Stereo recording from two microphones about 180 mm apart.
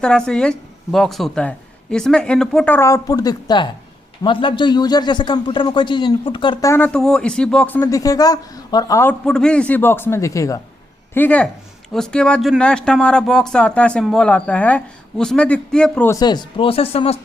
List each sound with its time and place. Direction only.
0.0 s a man's voice: 5° left (ahead or behind)
7.8 s a man's voice: 20° left (ahead or behind)
9.2 s a man's voice: 5° left (ahead or behind)
16.1 s a man's voice: 25° left (ahead or behind)